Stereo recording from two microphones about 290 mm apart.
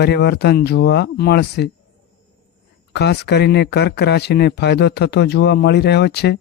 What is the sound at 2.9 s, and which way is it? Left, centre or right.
Speech, left.